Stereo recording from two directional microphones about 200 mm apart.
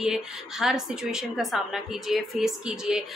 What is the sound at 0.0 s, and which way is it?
A woman's voice, centre (ahead or behind).